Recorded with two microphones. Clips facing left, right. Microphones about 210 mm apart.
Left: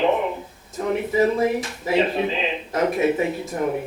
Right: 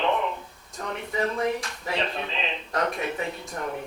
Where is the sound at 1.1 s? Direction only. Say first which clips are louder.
Left 6 dB; 5° left (ahead or behind).